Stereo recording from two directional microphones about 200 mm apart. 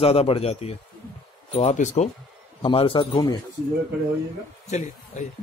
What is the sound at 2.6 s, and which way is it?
Speech, 25° left (ahead or behind).